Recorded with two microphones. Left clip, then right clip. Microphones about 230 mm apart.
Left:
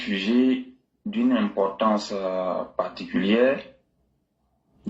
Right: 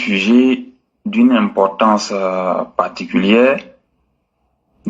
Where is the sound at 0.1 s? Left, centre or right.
Right.